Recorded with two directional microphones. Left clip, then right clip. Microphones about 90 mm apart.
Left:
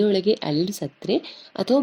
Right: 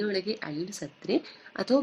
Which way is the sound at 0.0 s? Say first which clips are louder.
Left 10 dB; 35° left (ahead or behind).